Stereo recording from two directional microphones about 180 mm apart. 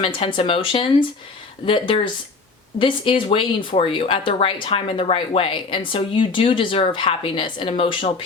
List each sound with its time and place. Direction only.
0.0 s speech: 30° left (ahead or behind)